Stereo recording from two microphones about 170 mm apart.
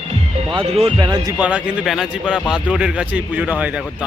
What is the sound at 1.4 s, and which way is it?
Speech, 5° right (ahead or behind).